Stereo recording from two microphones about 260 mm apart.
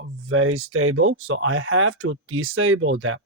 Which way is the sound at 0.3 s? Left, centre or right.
Right.